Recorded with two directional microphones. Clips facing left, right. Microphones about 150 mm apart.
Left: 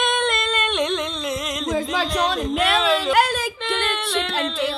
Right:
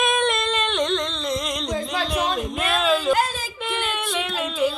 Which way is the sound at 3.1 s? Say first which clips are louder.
Left 2 dB; 70° left (ahead or behind).